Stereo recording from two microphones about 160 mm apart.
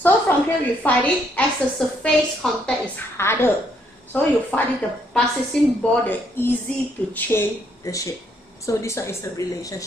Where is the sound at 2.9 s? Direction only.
15° left (ahead or behind).